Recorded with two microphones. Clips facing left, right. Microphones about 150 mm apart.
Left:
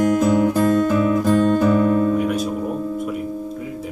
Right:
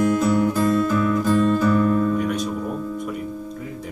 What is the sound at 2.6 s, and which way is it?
Music, 25° left (ahead or behind).